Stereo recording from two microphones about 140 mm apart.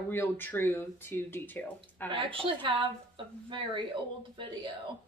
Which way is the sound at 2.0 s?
40° right (ahead or behind).